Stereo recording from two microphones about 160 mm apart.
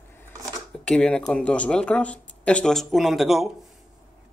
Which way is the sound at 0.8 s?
5° left (ahead or behind).